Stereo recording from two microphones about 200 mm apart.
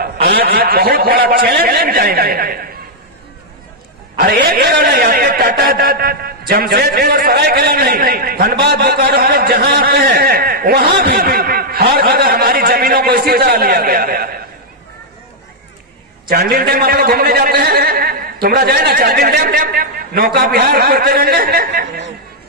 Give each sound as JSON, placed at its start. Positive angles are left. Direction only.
{"t": 0.0, "sound": "a man's voice", "side_deg": -50}
{"t": 4.2, "sound": "a man's voice", "side_deg": -45}
{"t": 16.3, "sound": "a man's voice", "side_deg": -45}